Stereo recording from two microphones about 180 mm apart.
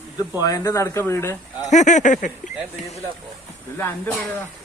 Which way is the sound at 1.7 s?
40° left (ahead or behind).